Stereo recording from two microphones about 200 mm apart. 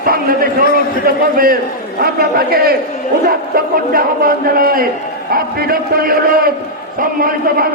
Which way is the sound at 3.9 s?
45° right (ahead or behind).